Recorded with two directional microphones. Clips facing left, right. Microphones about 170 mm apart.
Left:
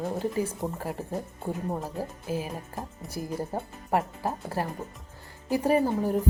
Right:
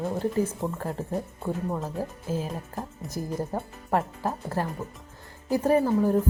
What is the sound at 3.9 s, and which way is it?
A woman's voice, 15° left (ahead or behind).